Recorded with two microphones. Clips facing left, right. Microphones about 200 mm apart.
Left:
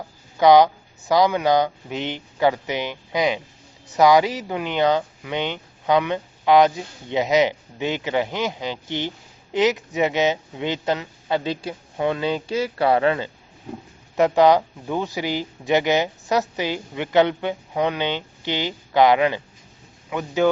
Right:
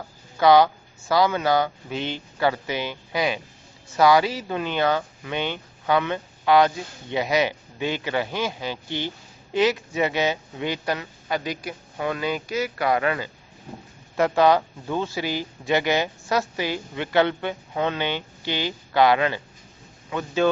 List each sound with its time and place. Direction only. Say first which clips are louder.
0.3 s speech: left 3 dB; 15° left (ahead or behind)